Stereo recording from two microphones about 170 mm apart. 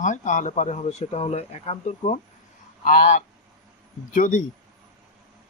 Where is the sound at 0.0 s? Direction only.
45° left (ahead or behind).